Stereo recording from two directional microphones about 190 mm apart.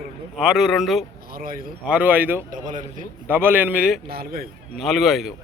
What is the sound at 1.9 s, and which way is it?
Speech, 10° right (ahead or behind).